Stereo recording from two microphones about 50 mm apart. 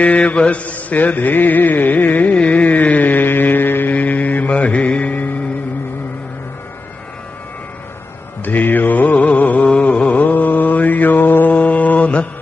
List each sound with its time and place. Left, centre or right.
0.0 s music: left
2.3 s mantra: left
3.9 s music: left
8.5 s mantra: left
9.7 s mantra: left
11.5 s mantra: left